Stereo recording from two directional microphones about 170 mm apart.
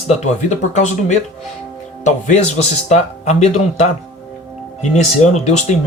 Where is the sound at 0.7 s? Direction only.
45° left (ahead or behind).